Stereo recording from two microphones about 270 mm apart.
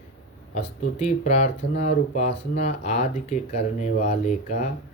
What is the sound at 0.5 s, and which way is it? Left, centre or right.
Speech, left.